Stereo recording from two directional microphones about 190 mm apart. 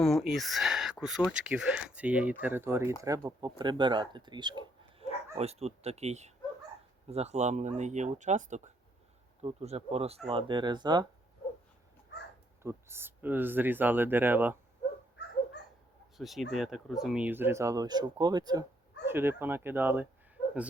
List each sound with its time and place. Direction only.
0.0 s speech: centre (ahead or behind); by 5.0 s 25° right (ahead or behind)
5.3 s speech: 35° right (ahead or behind)
12.6 s speech: 10° right (ahead or behind)
16.1 s speech: centre (ahead or behind)